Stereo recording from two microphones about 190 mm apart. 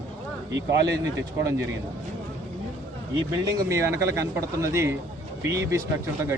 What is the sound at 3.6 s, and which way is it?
Speech, 15° right (ahead or behind).